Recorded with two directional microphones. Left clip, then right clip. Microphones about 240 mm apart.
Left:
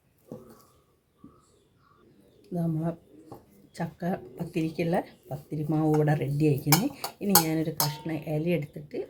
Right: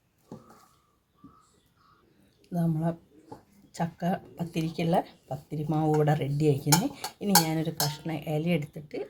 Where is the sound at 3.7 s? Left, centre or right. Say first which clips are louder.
Right 2 dB; right.